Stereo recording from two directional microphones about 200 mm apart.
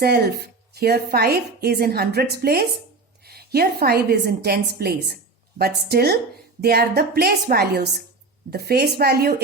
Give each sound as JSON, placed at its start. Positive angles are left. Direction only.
{"t": 0.0, "sound": "a woman's voice", "side_deg": -50}